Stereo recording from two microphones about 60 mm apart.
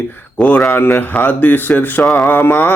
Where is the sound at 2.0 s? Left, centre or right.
Centre.